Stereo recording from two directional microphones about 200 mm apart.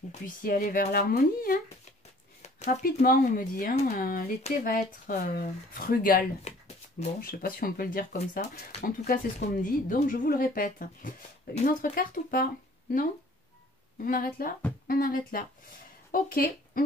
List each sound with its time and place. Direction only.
0.1 s speech: 45° left (ahead or behind)
2.4 s a sound: 35° left (ahead or behind)
3.0 s speech: 45° left (ahead or behind)
6.5 s a sound: 35° left (ahead or behind)
7.2 s speech: 45° left (ahead or behind)
14.0 s speech: 45° left (ahead or behind)